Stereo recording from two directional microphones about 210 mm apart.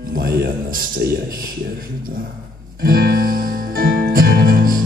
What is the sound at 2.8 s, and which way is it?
Music, 45° right (ahead or behind).